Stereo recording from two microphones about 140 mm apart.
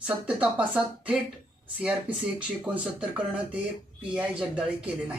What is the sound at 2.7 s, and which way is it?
Speech, 10° right (ahead or behind).